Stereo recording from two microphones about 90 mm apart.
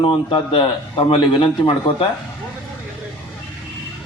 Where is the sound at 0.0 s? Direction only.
85° left; by 2.0 s 70° left (ahead or behind).